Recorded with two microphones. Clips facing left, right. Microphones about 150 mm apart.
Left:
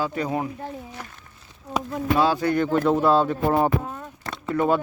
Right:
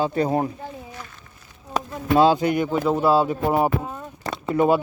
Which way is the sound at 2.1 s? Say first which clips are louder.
Right 4 dB; 20° right (ahead or behind).